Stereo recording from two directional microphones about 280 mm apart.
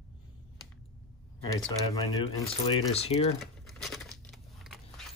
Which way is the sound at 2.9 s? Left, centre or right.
Left.